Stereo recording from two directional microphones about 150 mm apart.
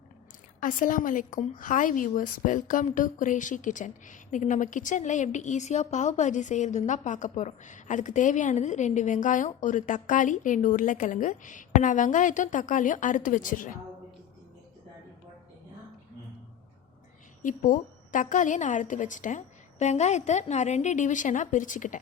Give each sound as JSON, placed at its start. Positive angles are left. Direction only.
{"t": 0.6, "sound": "a woman's voice", "side_deg": 60}
{"t": 17.4, "sound": "a woman's voice", "side_deg": 60}